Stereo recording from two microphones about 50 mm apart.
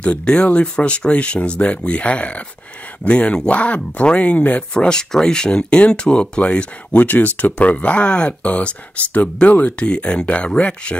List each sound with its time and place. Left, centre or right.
0.0 s speech: left
4.7 s speech: centre